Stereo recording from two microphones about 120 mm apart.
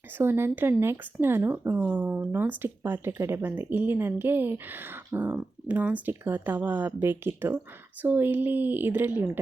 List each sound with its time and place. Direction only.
0.2 s speech: 20° right (ahead or behind)